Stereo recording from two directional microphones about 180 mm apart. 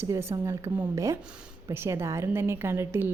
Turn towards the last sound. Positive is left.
turn(degrees=-15)  # may be behind; listen again after turning